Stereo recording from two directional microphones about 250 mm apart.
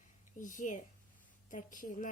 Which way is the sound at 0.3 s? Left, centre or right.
Left.